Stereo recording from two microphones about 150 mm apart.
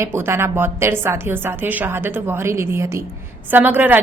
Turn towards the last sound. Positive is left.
turn(degrees=-10)  # may be behind; listen again after turning